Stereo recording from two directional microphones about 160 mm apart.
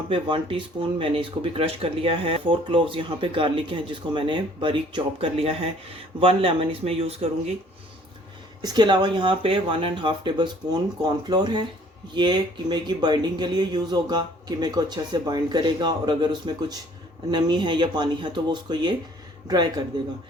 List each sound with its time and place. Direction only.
0.1 s speech: 30° right (ahead or behind)
8.6 s speech: 25° right (ahead or behind)